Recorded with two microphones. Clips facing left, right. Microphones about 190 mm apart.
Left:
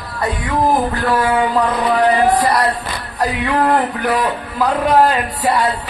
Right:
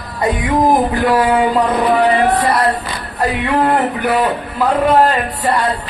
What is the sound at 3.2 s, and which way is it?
A man's voice, centre (ahead or behind).